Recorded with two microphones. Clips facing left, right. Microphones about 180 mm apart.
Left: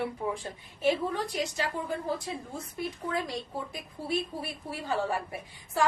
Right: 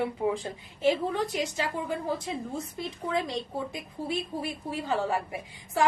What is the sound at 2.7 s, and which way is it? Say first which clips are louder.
Speech: right 1 dB; 20° right (ahead or behind).